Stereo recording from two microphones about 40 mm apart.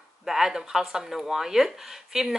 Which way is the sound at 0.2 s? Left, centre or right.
Centre.